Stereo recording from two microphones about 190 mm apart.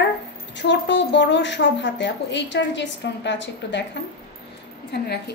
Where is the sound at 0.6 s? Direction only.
70° left (ahead or behind).